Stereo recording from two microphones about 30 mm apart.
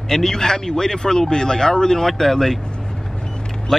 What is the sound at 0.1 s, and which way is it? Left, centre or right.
Speech, centre.